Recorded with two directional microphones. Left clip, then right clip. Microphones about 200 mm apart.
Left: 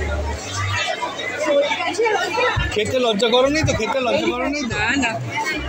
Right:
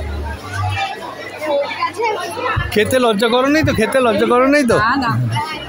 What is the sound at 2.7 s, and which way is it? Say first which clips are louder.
Speech: right 5 dB; 45° right (ahead or behind).